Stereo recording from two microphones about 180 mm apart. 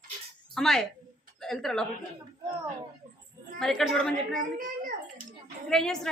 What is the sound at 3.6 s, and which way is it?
Speech, 5° left (ahead or behind).